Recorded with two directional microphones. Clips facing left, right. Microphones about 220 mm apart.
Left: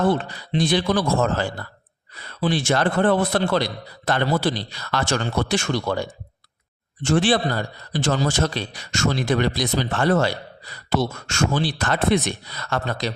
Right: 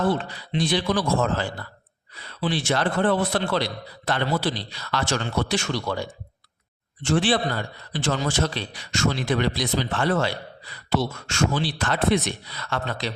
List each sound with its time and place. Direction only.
0.3 s a man's voice: 45° left (ahead or behind)